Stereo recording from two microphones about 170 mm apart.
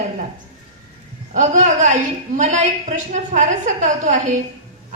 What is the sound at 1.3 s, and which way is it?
A woman's voice, 45° right (ahead or behind).